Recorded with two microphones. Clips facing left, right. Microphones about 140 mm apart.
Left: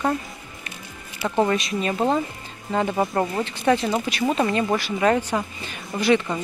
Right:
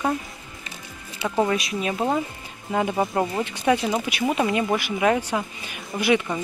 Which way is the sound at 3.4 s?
10° right (ahead or behind).